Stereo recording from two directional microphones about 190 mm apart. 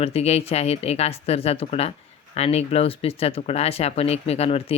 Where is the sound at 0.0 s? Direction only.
35° left (ahead or behind).